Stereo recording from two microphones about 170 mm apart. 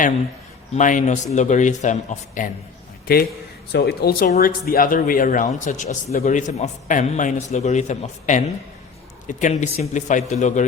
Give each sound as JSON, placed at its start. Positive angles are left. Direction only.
{"t": 0.7, "sound": "a man's voice", "side_deg": 50}
{"t": 3.1, "sound": "a man's voice", "side_deg": 65}